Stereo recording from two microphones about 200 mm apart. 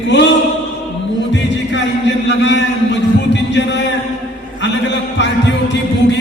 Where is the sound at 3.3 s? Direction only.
60° left (ahead or behind).